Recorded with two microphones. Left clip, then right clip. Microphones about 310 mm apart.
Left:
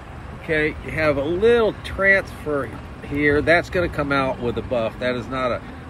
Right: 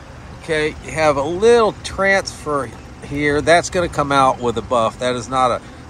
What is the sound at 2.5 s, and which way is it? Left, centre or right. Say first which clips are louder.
Speech: right 4 dB; right.